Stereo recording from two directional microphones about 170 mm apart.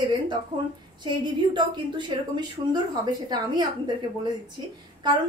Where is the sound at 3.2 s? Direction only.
25° right (ahead or behind).